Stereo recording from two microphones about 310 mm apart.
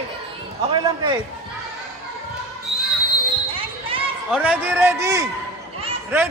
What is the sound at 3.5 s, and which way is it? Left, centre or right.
Basketball bounce, centre.